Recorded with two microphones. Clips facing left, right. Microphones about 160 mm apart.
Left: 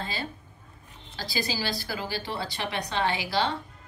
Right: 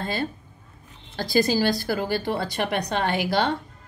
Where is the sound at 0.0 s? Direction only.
55° right (ahead or behind).